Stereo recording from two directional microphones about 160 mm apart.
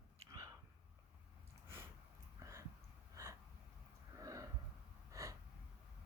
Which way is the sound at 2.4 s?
20° right (ahead or behind).